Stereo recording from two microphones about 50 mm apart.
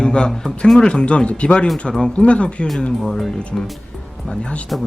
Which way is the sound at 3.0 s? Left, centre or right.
Centre.